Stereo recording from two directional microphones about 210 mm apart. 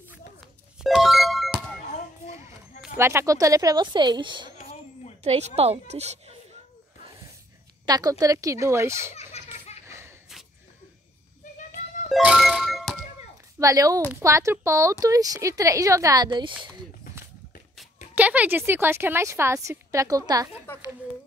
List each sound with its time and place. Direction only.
0.8 s music: centre (ahead or behind)
3.0 s a woman's voice: 10° right (ahead or behind)
4.6 s a sound: 30° left (ahead or behind)
5.2 s speech: 30° right (ahead or behind)
7.8 s a woman's voice: 15° right (ahead or behind)
9.1 s a sound: 30° left (ahead or behind)
9.8 s a sound: 10° right (ahead or behind)
12.1 s music: 5° right (ahead or behind)
13.6 s a woman's voice: 15° right (ahead or behind)
18.1 s a woman's voice: 5° right (ahead or behind)
20.7 s a woman's voice: 10° left (ahead or behind)